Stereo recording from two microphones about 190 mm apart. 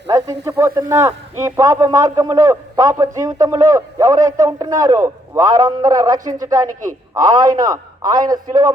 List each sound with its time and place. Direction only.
0.4 s a man's voice: 15° right (ahead or behind)